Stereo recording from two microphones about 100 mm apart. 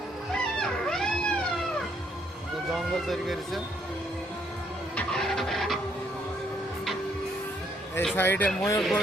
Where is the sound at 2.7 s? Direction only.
Centre (ahead or behind).